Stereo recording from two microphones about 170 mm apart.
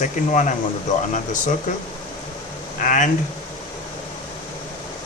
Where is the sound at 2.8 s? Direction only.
50° left (ahead or behind).